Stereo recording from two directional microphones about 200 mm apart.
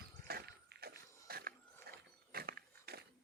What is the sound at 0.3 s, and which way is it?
Mechanisms, 50° right (ahead or behind).